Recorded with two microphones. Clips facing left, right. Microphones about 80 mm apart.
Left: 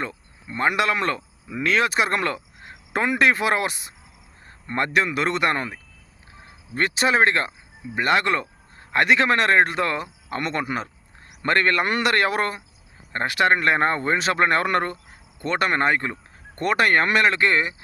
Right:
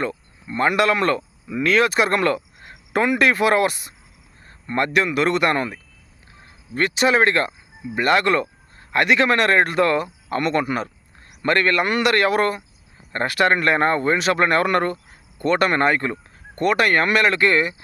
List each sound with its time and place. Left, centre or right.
0.4 s a man's voice: centre
16.6 s a man's voice: left